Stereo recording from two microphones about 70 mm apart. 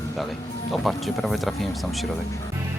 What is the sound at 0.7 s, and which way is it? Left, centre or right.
Speech, centre.